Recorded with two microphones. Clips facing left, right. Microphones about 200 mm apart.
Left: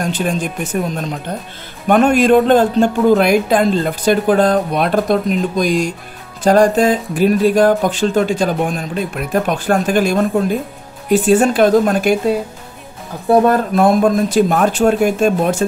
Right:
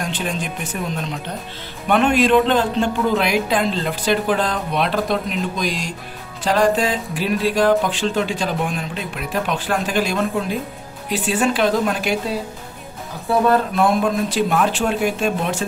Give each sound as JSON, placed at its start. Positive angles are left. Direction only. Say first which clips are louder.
{"t": 0.0, "sound": "speech", "louder": "left 6 dB", "side_deg": 45}
{"t": 1.9, "sound": "speech", "louder": "left 5 dB", "side_deg": 45}
{"t": 13.3, "sound": "speech", "louder": "left 5 dB", "side_deg": 45}